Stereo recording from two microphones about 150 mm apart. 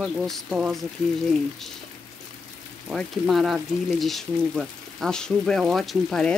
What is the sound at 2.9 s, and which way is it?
Speech, 5° right (ahead or behind).